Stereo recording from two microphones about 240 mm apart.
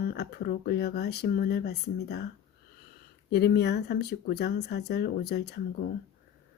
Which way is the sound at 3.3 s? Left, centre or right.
Left.